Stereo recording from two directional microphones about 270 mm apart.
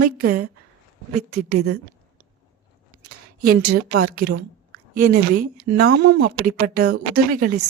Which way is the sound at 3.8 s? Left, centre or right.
Right.